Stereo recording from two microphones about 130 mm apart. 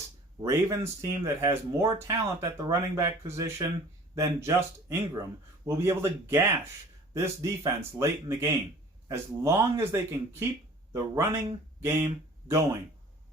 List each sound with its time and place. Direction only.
0.4 s speech: 25° right (ahead or behind)